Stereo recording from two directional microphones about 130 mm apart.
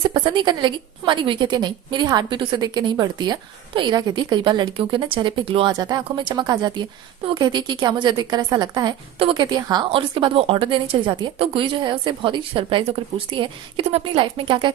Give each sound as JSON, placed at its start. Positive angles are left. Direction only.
{"t": 0.0, "sound": "a woman's voice", "side_deg": -40}